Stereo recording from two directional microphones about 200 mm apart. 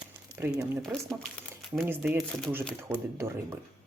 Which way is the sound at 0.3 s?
5° right (ahead or behind).